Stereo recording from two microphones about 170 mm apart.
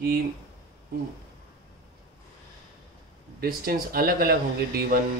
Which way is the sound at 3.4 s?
60° right (ahead or behind).